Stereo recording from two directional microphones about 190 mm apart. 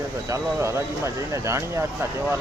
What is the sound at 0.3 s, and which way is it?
Speech, 15° right (ahead or behind).